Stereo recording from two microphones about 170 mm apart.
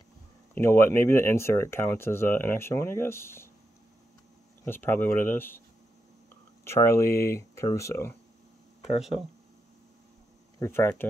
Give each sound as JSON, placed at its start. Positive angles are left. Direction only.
{"t": 0.6, "sound": "speech", "side_deg": 15}
{"t": 4.6, "sound": "speech", "side_deg": 10}
{"t": 6.6, "sound": "speech", "side_deg": 15}
{"t": 10.6, "sound": "speech", "side_deg": 15}